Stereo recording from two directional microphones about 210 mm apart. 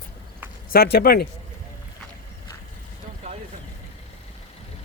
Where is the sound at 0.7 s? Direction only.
45° left (ahead or behind).